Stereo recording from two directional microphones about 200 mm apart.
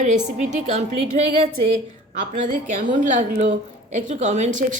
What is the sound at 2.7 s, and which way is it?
A woman's voice, 40° right (ahead or behind).